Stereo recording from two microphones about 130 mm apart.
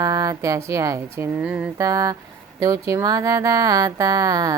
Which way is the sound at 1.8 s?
25° right (ahead or behind).